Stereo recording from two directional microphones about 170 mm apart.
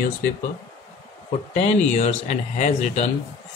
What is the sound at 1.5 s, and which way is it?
Speech, 40° left (ahead or behind).